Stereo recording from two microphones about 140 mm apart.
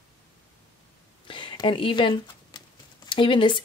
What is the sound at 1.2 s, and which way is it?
Speech, 35° left (ahead or behind).